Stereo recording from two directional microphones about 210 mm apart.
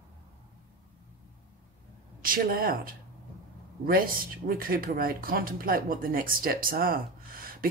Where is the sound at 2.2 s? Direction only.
45° right (ahead or behind).